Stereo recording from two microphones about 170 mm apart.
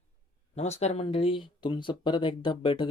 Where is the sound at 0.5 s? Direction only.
40° left (ahead or behind).